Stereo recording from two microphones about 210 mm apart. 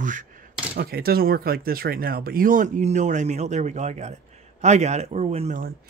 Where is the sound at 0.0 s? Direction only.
40° right (ahead or behind).